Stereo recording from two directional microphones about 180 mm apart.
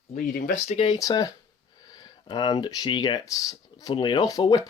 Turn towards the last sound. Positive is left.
turn(degrees=20)  # may be behind; listen again after turning